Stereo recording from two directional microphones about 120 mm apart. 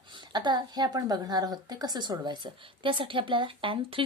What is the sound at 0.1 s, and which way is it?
A woman's voice, 40° right (ahead or behind).